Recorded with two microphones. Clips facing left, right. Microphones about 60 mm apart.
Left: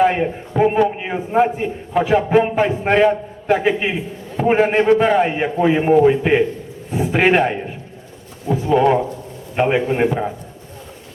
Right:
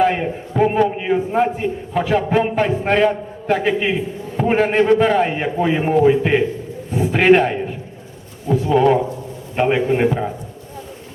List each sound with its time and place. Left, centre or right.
0.0 s a man's voice: centre